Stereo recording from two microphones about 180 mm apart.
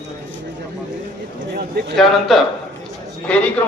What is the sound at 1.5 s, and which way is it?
Speech, 60° right (ahead or behind).